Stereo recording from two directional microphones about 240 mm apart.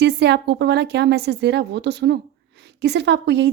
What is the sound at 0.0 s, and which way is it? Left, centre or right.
A woman's voice, right.